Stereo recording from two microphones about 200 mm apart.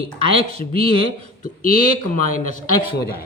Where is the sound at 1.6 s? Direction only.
40° left (ahead or behind).